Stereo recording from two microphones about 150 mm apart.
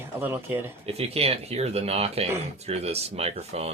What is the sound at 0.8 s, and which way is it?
Speech, 40° right (ahead or behind).